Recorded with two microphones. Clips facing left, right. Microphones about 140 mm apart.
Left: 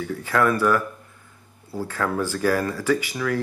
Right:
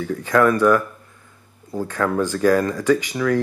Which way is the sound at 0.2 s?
20° right (ahead or behind).